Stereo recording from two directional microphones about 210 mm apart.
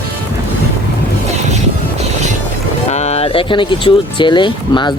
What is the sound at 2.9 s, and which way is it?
Speech, 30° left (ahead or behind).